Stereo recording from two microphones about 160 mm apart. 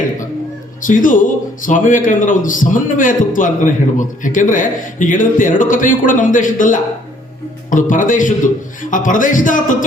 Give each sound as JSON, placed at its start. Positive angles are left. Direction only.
{"t": 0.8, "sound": "a man's voice", "side_deg": 55}